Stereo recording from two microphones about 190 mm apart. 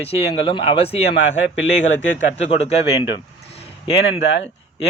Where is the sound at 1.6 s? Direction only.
80° left.